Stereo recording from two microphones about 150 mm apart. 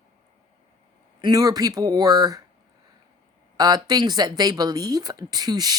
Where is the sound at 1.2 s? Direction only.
25° right (ahead or behind).